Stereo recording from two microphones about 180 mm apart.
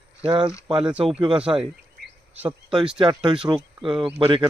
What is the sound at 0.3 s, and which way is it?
Speech, 25° right (ahead or behind).